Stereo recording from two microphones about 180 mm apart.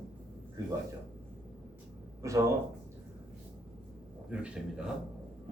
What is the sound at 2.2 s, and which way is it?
Speech, 15° right (ahead or behind).